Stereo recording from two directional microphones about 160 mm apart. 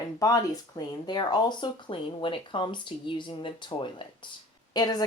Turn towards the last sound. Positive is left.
turn(degrees=25)  # may be behind; listen again after turning